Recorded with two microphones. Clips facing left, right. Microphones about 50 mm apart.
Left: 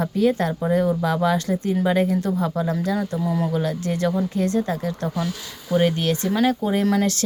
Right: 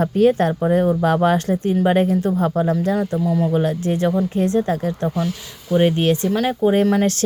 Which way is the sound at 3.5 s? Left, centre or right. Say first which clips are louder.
Right 4 dB; right.